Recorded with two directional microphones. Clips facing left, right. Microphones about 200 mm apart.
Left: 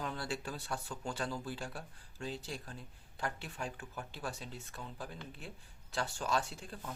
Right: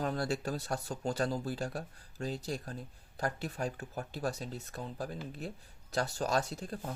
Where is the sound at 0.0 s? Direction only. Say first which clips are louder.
Right 6 dB; 40° right (ahead or behind).